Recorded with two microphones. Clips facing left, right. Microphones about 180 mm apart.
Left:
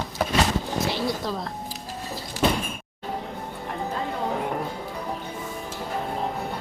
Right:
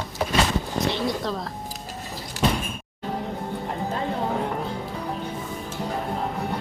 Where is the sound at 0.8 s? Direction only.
Centre (ahead or behind).